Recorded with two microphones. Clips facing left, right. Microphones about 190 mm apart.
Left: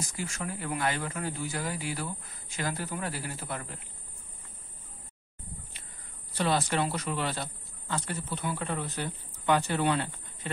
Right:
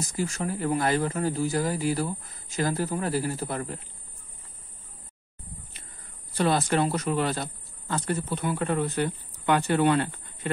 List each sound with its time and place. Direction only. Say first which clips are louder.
0.0 s speech: right 7 dB; 35° right (ahead or behind)
6.3 s speech: right 4 dB; 45° right (ahead or behind)